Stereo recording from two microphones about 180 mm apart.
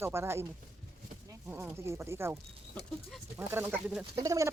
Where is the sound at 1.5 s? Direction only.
10° right (ahead or behind).